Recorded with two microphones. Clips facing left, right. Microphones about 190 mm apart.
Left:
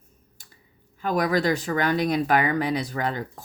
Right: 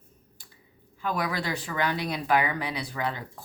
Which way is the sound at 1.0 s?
45° left (ahead or behind).